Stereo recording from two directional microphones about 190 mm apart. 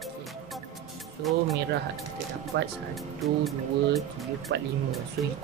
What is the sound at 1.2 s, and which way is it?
Speech, centre (ahead or behind).